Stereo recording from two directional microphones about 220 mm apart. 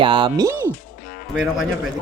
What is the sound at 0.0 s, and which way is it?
Speech, 20° right (ahead or behind).